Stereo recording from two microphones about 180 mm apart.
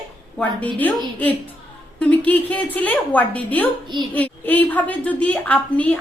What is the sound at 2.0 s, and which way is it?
A woman's voice, 10° left (ahead or behind).